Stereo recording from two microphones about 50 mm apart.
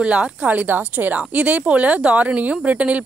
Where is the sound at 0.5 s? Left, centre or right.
Right.